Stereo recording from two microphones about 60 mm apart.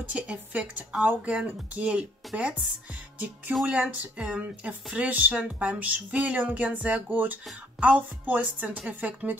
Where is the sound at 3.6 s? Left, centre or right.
Centre.